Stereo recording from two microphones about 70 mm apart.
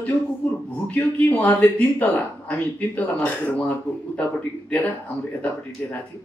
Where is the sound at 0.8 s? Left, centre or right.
Left.